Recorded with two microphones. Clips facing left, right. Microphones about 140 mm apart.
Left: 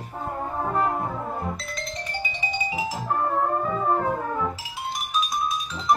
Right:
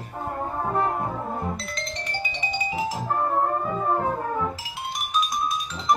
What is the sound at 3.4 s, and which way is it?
Music, 10° right (ahead or behind).